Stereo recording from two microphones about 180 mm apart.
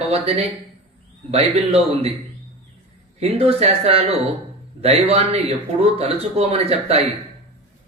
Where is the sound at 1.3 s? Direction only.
35° right (ahead or behind).